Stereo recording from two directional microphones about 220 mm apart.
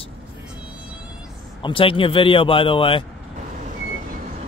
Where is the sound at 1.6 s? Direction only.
25° left (ahead or behind).